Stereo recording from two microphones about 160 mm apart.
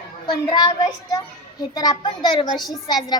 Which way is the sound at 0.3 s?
25° left (ahead or behind).